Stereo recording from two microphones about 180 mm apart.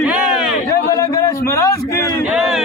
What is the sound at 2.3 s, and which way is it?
Speech, centre (ahead or behind).